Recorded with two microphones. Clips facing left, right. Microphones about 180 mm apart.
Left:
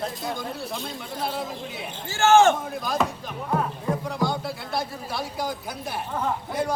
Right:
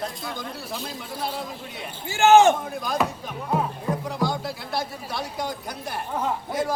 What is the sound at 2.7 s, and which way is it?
Speech, centre (ahead or behind).